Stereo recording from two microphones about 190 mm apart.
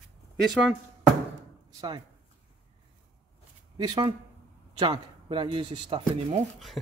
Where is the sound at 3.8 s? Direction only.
25° right (ahead or behind).